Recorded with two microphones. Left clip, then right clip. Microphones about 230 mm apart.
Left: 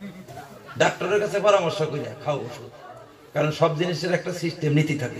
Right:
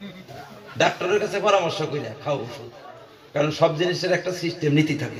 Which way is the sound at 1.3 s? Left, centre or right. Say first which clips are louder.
Left 2 dB; right.